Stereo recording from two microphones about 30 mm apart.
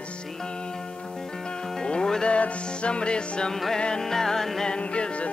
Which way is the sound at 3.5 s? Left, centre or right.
Centre.